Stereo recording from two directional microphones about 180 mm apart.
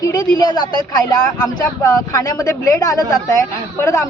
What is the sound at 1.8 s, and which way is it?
A woman's voice, 20° left (ahead or behind).